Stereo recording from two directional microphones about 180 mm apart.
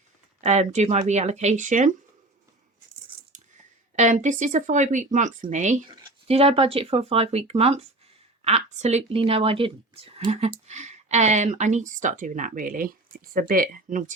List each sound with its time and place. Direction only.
0.4 s speech: 40° right (ahead or behind)
3.9 s speech: 40° right (ahead or behind)